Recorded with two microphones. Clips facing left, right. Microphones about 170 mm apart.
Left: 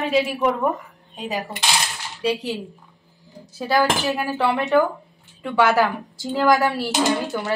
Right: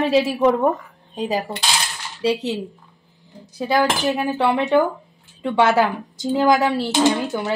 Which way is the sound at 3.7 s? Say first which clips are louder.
Right 1 dB; 20° right (ahead or behind).